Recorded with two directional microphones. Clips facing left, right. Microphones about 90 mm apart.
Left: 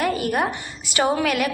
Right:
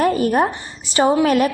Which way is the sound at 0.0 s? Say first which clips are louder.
Right 6 dB; 35° right (ahead or behind).